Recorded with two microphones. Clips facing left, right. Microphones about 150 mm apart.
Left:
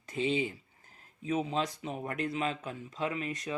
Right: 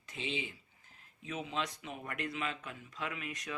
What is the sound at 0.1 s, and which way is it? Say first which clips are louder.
Speech: left 9 dB; 40° left (ahead or behind).